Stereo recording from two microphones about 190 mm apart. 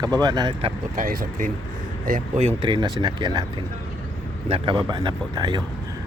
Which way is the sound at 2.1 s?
35° right (ahead or behind).